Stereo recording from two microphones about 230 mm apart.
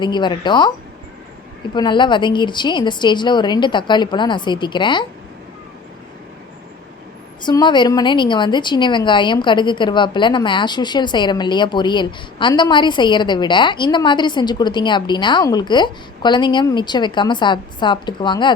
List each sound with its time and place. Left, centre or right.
0.0 s a woman's voice: centre
1.7 s a woman's voice: centre
7.4 s a woman's voice: centre